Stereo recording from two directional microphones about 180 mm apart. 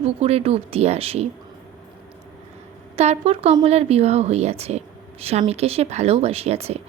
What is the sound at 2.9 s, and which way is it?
Speech, 35° right (ahead or behind).